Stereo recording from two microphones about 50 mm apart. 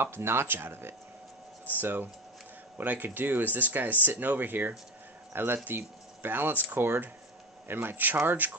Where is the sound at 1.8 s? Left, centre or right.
Right.